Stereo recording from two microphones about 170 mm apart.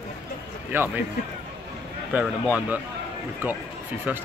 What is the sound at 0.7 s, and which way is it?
Speech, 15° right (ahead or behind).